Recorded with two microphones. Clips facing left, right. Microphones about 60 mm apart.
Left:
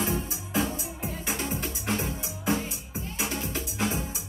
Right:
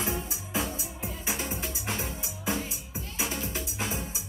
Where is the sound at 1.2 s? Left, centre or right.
Centre.